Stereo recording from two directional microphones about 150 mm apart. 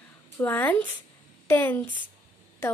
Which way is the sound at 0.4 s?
15° left (ahead or behind).